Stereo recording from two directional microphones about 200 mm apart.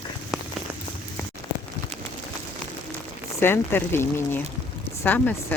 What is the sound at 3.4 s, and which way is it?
Speech, 10° left (ahead or behind).